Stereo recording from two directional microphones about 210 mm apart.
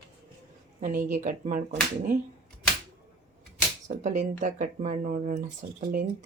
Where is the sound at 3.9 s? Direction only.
35° right (ahead or behind).